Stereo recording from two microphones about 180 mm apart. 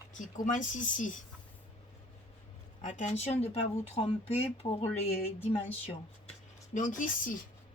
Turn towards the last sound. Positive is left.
turn(degrees=45)  # may be behind; listen again after turning